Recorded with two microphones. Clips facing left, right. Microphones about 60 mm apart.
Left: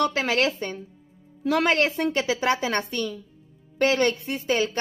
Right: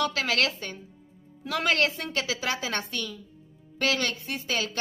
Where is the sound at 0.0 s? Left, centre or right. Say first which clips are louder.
Left 4 dB; left.